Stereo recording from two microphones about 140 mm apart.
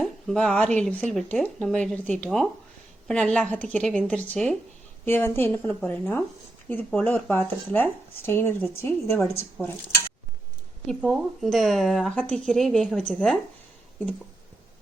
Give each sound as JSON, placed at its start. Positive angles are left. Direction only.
{"t": 0.0, "sound": "a sound", "side_deg": 5}
{"t": 0.8, "sound": "speech", "side_deg": 10}
{"t": 11.0, "sound": "speech", "side_deg": 0}